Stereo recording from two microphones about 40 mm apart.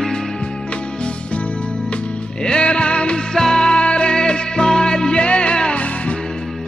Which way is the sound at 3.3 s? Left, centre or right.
Centre.